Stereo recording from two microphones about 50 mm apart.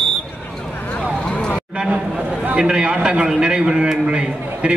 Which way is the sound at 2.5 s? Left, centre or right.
Centre.